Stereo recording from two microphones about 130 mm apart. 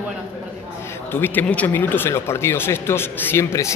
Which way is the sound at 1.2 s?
15° left (ahead or behind).